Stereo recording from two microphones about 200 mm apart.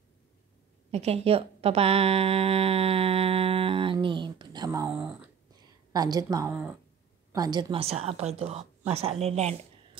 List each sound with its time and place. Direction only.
0.9 s a woman's voice: 30° right (ahead or behind); by 5.3 s 10° right (ahead or behind)
5.9 s a woman's voice: 20° right (ahead or behind)
6.5 s speech: 5° right (ahead or behind)
7.3 s a woman's voice: 20° right (ahead or behind)